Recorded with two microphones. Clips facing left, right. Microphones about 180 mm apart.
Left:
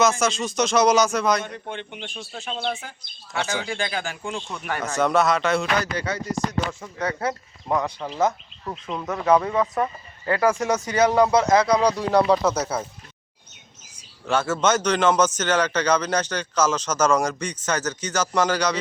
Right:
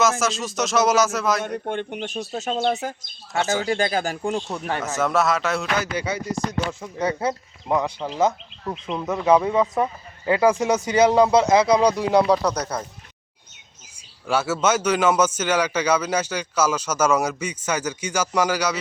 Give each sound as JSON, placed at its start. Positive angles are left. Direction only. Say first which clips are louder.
{"t": 0.0, "sound": "speech", "louder": "left 1 dB", "side_deg": 0}
{"t": 1.5, "sound": "speech", "louder": "right 7 dB", "side_deg": -50}
{"t": 4.8, "sound": "speech", "louder": "left 2 dB", "side_deg": 0}
{"t": 6.7, "sound": "a man's voice", "louder": "right 3 dB", "side_deg": -20}
{"t": 9.0, "sound": "a man's voice", "louder": "right 1 dB", "side_deg": -10}
{"t": 14.3, "sound": "a man's voice", "louder": "even", "side_deg": -10}